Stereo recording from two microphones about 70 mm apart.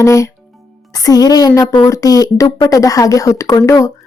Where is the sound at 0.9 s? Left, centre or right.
Left.